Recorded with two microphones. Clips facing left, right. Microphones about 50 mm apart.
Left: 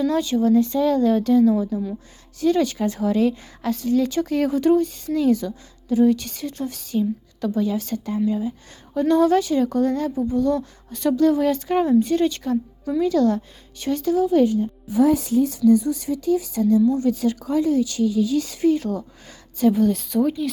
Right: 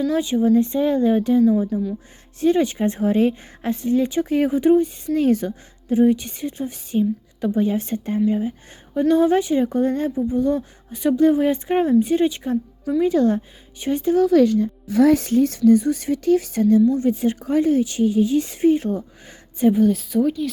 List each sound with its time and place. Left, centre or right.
0.1 s speech: right
2.4 s speech: right
5.1 s a woman's voice: right
9.0 s speech: centre
14.2 s a woman's voice: right
17.0 s a woman's voice: right
19.7 s a woman's voice: centre